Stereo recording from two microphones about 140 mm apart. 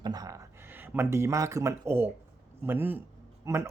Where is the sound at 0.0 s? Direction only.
25° right (ahead or behind).